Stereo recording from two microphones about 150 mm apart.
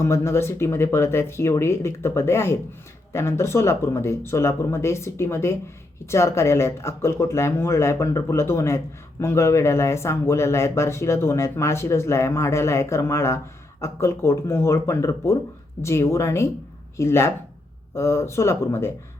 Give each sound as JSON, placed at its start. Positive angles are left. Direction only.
{"t": 0.0, "sound": "speech", "side_deg": 20}